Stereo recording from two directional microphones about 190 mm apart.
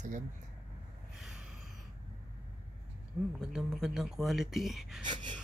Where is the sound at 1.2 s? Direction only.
5° right (ahead or behind).